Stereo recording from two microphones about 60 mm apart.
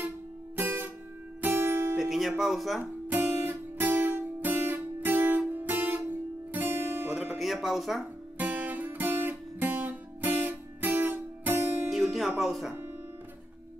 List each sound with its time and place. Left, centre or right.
0.6 s music: right
2.0 s speech: centre
2.8 s guitar: right
7.2 s music: centre
8.4 s guitar: right
11.9 s music: centre